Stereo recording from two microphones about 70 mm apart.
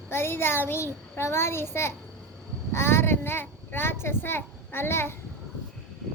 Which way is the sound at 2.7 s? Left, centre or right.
Left.